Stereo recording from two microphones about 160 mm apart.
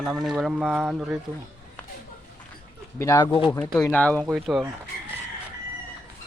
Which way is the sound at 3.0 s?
20° left (ahead or behind).